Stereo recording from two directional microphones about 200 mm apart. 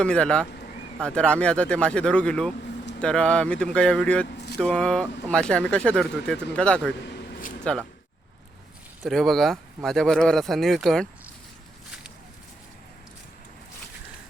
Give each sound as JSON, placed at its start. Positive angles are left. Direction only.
{"t": 0.0, "sound": "speech", "side_deg": 5}
{"t": 7.0, "sound": "a sound", "side_deg": 50}
{"t": 7.6, "sound": "speech", "side_deg": 5}
{"t": 9.0, "sound": "speech", "side_deg": 0}